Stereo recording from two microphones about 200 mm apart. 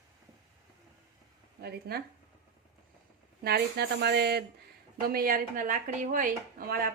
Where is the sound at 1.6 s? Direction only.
50° right (ahead or behind).